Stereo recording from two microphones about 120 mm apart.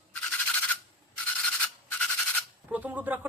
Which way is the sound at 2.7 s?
15° right (ahead or behind).